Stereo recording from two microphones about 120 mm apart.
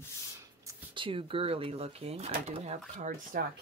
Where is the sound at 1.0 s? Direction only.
45° right (ahead or behind).